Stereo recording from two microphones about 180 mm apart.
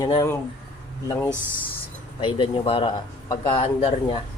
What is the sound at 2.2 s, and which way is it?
Speech, 30° left (ahead or behind).